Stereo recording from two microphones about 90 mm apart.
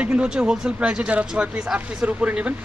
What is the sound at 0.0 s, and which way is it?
Speech, 15° right (ahead or behind).